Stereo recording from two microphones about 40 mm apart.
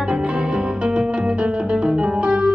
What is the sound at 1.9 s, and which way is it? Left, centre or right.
Music, right.